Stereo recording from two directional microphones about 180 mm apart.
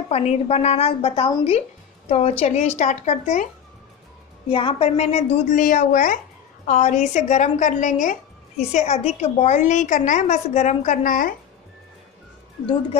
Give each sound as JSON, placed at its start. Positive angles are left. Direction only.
{"t": 0.1, "sound": "a woman's voice", "side_deg": 35}
{"t": 4.5, "sound": "a woman's voice", "side_deg": 30}
{"t": 5.6, "sound": "a woman's voice", "side_deg": 50}